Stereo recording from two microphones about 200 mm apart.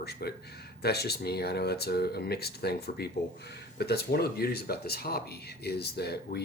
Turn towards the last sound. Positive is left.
turn(degrees=55)  # may be behind; listen again after turning